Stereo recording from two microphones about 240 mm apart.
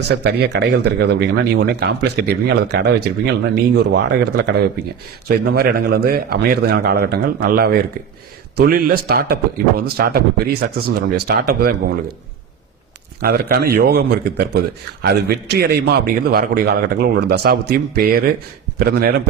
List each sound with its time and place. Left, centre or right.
0.1 s speech: right
5.3 s a man's voice: right
13.2 s a man's voice: right